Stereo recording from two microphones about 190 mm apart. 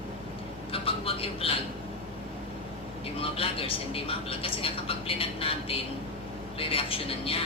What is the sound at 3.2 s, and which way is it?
Speech, 30° left (ahead or behind).